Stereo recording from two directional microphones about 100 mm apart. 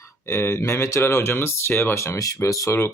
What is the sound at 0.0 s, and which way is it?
Speech, 25° left (ahead or behind).